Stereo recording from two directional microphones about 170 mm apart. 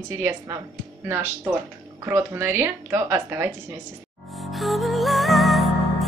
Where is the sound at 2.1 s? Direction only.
15° right (ahead or behind).